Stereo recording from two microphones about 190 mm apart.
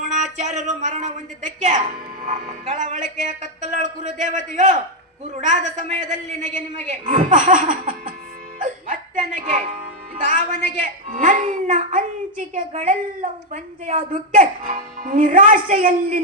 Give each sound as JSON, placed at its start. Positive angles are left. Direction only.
{"t": 0.0, "sound": "speech", "side_deg": -40}
{"t": 2.2, "sound": "speech", "side_deg": -40}
{"t": 8.5, "sound": "dog", "side_deg": -40}
{"t": 10.2, "sound": "speech", "side_deg": -40}